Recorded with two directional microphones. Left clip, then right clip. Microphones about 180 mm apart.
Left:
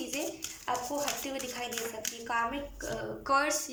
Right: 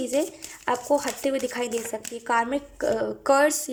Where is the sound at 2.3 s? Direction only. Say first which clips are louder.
Right 9 dB; 55° right (ahead or behind).